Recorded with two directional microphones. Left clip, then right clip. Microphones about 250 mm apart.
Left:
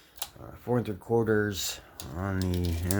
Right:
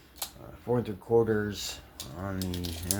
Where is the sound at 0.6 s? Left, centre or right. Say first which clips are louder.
Even; left.